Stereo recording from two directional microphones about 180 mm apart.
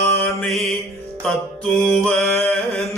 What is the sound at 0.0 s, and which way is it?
Mantra, 5° left (ahead or behind).